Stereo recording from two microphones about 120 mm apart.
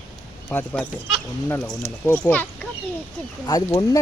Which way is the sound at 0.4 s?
15° left (ahead or behind).